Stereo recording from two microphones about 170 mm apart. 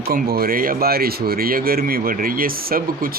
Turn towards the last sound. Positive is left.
turn(degrees=-60)  # may be behind; listen again after turning